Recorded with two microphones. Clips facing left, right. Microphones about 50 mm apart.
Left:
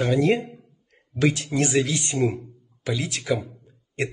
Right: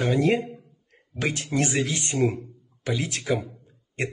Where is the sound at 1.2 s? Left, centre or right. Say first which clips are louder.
Left 3 dB; right.